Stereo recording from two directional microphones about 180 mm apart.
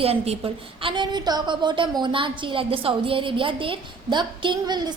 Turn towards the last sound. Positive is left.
turn(degrees=-25)  # may be behind; listen again after turning